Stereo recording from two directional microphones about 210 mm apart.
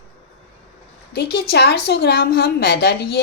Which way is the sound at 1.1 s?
50° left (ahead or behind).